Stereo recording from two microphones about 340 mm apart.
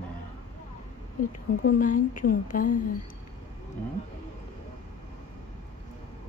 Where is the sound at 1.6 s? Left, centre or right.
Left.